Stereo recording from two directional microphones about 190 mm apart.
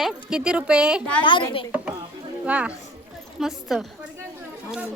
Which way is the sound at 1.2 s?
25° left (ahead or behind).